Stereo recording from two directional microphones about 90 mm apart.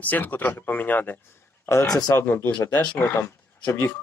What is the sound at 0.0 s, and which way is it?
Speech, 20° left (ahead or behind).